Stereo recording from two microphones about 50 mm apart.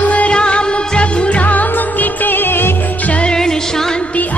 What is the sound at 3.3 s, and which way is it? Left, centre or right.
Music, centre.